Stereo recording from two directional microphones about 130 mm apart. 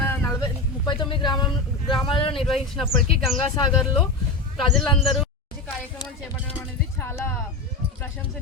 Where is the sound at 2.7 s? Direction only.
5° right (ahead or behind).